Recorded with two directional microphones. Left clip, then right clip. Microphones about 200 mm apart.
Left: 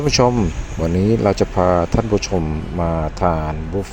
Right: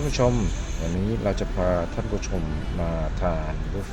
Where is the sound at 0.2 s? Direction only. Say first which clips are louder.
Left 6 dB; 35° left (ahead or behind).